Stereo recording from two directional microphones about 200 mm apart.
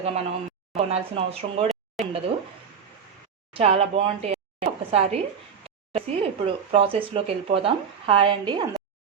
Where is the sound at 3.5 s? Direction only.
30° right (ahead or behind).